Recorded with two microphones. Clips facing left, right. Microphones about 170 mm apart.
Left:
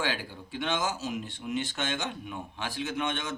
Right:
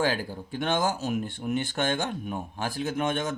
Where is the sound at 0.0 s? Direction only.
45° right (ahead or behind).